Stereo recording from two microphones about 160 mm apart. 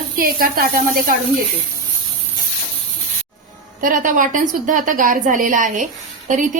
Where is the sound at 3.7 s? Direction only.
60° right (ahead or behind).